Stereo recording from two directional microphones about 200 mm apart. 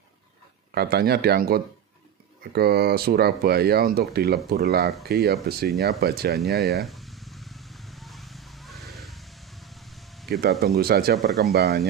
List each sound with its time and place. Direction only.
0.7 s speech: 50° right (ahead or behind)
6.8 s a sound: centre (ahead or behind)
10.6 s speech: 50° right (ahead or behind)
11.1 s speech: centre (ahead or behind)
11.5 s speech: 50° right (ahead or behind)